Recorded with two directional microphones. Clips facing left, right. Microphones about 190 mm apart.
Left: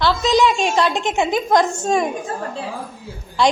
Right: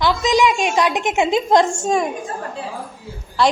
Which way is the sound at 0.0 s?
15° right (ahead or behind).